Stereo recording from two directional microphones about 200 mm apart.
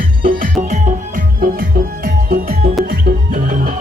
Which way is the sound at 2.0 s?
45° right (ahead or behind).